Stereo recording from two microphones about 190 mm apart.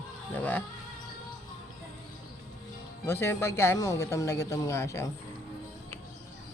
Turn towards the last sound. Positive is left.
turn(degrees=15)  # may be behind; listen again after turning